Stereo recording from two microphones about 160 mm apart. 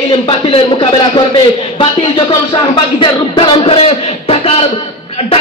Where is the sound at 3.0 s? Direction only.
30° left (ahead or behind).